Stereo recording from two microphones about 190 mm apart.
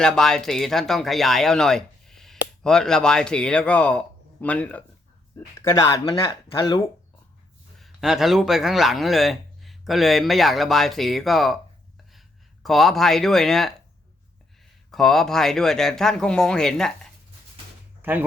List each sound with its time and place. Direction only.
0.0 s speech: 5° left (ahead or behind); by 6.8 s 25° left (ahead or behind)
7.8 s a man's voice: centre (ahead or behind)
12.6 s a man's voice: centre (ahead or behind)
14.8 s a man's voice: centre (ahead or behind)
18.0 s speech: 10° right (ahead or behind)